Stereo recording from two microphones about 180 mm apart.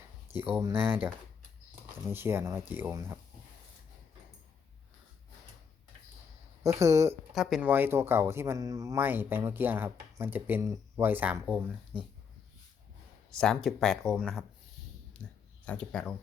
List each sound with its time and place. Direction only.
0.3 s speech: 10° right (ahead or behind)
6.6 s speech: 15° right (ahead or behind)
7.3 s speech: 5° right (ahead or behind)
13.4 s speech: centre (ahead or behind)